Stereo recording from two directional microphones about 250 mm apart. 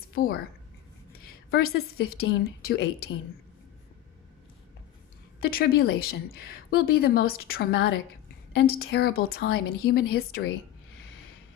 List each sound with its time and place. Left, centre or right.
0.1 s speech: left
1.5 s a woman's voice: left
5.4 s a woman's voice: left